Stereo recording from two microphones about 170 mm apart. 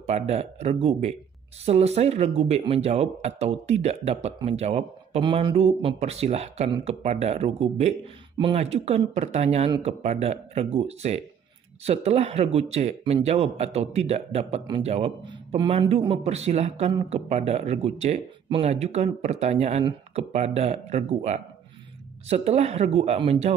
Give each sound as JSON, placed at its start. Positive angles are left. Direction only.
{"t": 0.0, "sound": "speech", "side_deg": -40}